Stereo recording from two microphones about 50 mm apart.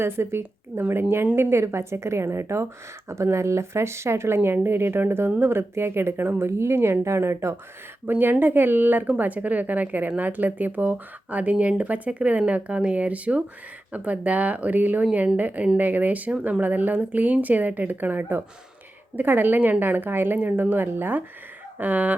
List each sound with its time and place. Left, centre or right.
0.0 s speech: right
1.4 s speech: right
4.5 s a woman's voice: right
8.0 s a woman's voice: right